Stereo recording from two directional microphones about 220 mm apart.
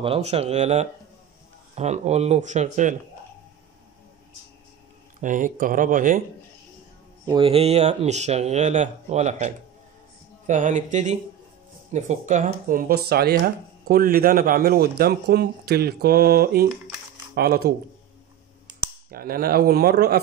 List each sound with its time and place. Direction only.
0.0 s speech: 25° right (ahead or behind)
5.2 s speech: 35° right (ahead or behind)
7.2 s speech: 25° right (ahead or behind); by 20.2 s 45° right (ahead or behind)